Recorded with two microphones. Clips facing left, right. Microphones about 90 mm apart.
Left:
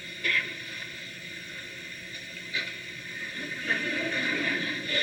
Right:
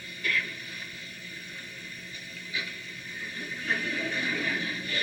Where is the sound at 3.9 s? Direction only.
40° left (ahead or behind).